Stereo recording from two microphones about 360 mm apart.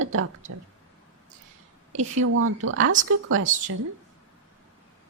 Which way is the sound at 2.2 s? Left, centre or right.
Right.